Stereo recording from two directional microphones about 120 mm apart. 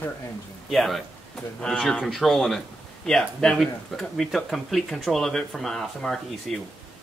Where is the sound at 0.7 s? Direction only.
Centre (ahead or behind).